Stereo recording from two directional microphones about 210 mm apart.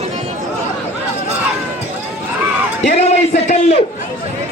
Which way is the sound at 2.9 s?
30° left (ahead or behind).